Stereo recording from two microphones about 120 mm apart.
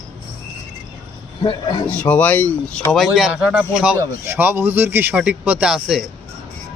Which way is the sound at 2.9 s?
Centre (ahead or behind).